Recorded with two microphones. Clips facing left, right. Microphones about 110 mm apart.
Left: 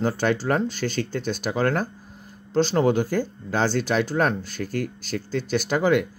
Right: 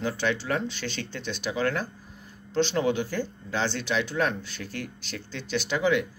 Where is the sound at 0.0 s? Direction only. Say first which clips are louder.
Left 5 dB; 45° left (ahead or behind).